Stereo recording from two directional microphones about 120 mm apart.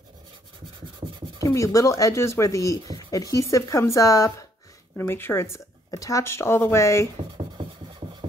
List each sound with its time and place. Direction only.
1.4 s speech: 25° left (ahead or behind)
8.0 s rub: 45° right (ahead or behind)